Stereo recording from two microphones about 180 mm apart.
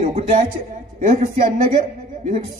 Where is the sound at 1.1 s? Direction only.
50° right (ahead or behind).